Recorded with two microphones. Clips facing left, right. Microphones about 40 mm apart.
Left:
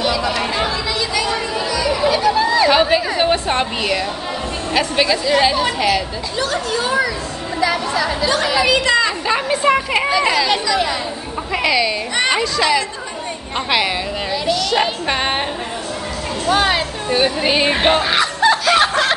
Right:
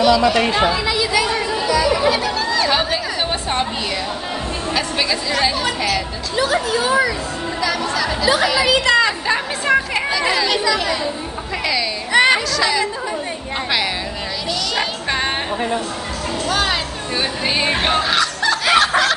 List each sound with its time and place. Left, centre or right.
0.0 s speech: centre
0.7 s speech: centre
1.7 s music: centre
2.3 s a woman's voice: centre
6.3 s speech: centre
7.6 s a woman's voice: centre
8.6 s a woman's voice: centre
9.7 s speech: centre
10.1 s a woman's voice: centre
12.1 s speech: centre
12.4 s a woman's voice: centre
14.5 s a woman's voice: centre
16.4 s speech: centre
18.8 s snicker: centre